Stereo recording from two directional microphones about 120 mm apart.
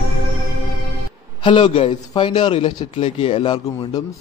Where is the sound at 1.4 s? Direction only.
45° left (ahead or behind).